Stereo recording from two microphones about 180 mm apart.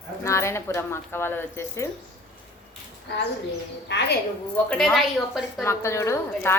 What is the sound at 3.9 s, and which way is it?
Speech, 70° left (ahead or behind).